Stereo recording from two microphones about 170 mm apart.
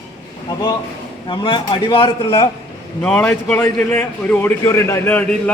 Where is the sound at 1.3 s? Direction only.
30° left (ahead or behind).